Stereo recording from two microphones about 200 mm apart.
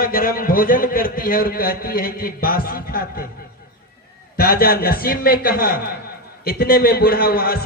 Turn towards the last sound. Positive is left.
turn(degrees=50)  # may be behind; listen again after turning